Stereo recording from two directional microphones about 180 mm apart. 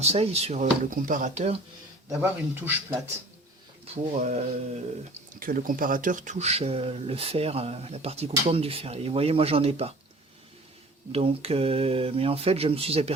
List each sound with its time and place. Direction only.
0.0 s speech: 35° right (ahead or behind)
2.0 s speech: 10° right (ahead or behind)
3.8 s speech: 40° right (ahead or behind)
5.3 s speech: 50° right (ahead or behind); by 9.9 s 35° right (ahead or behind)
11.1 s speech: 35° right (ahead or behind)